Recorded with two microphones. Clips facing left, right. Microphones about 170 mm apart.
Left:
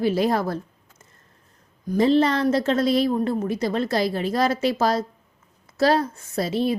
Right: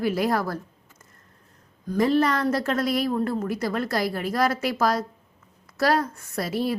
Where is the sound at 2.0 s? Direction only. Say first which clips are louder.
Left 3 dB; 25° left (ahead or behind).